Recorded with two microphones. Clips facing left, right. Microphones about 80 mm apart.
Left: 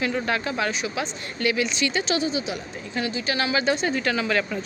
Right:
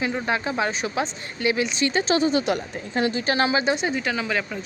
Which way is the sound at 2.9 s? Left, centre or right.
Right.